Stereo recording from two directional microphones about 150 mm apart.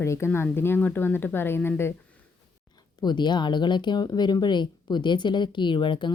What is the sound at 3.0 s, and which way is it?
A woman's voice, 30° left (ahead or behind).